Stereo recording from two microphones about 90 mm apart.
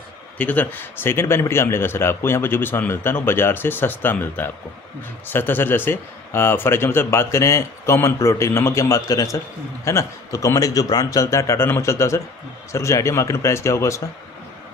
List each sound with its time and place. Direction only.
0.3 s a man's voice: 20° left (ahead or behind)